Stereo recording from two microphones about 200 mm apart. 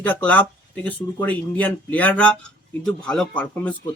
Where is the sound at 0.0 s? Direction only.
10° left (ahead or behind).